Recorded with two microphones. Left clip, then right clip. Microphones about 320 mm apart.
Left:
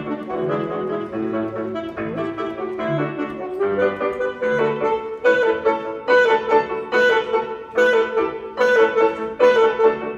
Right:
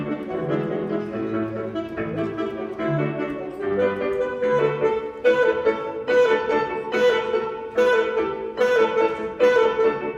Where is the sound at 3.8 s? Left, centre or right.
Centre.